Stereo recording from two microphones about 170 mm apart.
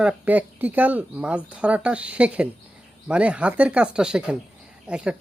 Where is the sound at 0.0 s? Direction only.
10° right (ahead or behind).